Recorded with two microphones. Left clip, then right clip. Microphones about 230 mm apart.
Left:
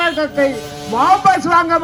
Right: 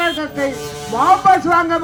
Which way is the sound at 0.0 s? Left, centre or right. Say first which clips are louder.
Left 3 dB; left.